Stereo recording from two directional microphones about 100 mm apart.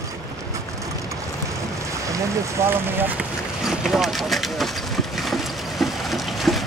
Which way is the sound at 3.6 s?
5° right (ahead or behind).